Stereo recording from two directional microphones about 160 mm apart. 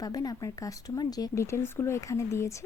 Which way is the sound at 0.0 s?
25° left (ahead or behind).